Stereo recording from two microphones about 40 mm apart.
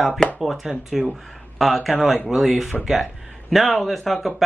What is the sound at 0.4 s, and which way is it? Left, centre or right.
Speech, centre.